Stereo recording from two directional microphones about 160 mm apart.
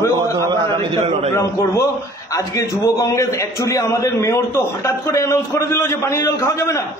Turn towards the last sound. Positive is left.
turn(degrees=20)  # may be behind; listen again after turning